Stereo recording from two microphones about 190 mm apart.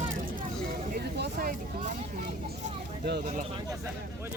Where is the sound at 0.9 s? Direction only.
55° right (ahead or behind).